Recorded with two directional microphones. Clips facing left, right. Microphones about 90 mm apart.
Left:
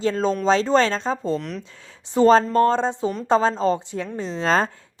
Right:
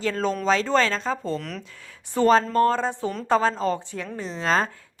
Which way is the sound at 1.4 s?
Centre (ahead or behind).